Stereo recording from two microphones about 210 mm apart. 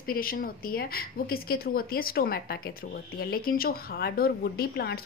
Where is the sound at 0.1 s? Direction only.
45° left (ahead or behind).